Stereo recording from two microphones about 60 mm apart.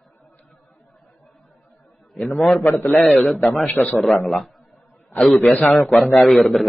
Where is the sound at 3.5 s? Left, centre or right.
Left.